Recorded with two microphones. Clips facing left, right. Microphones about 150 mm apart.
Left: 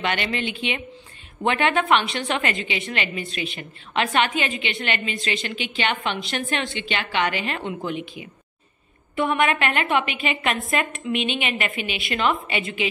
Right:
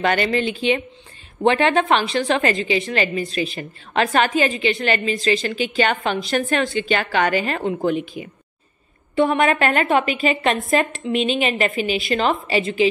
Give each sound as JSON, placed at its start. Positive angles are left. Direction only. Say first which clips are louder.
{"t": 0.0, "sound": "a woman's voice", "louder": "right 6 dB", "side_deg": -40}
{"t": 9.1, "sound": "a woman's voice", "louder": "right 4 dB", "side_deg": -30}